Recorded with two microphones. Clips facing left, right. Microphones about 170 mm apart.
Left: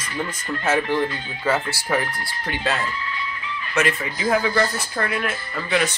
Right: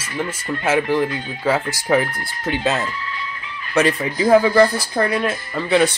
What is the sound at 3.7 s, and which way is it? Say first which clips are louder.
Speech: right 5 dB; 35° right (ahead or behind).